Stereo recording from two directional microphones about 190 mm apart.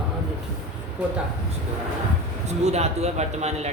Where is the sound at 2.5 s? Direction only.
35° right (ahead or behind).